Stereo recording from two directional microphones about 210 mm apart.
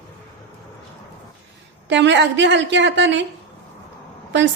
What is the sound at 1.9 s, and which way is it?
A woman's voice, 60° right (ahead or behind).